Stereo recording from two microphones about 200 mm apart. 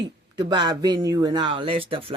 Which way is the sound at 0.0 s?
20° right (ahead or behind).